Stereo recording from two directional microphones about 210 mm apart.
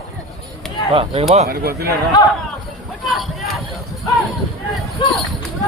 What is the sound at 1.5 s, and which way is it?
Speech, 50° right (ahead or behind).